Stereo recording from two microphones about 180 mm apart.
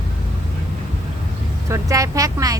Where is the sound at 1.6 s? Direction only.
15° right (ahead or behind).